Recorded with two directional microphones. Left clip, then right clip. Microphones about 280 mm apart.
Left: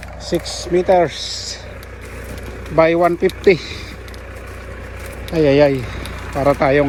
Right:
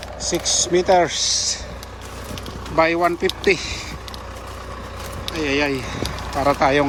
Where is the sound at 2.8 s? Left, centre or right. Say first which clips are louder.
Left 4 dB; centre.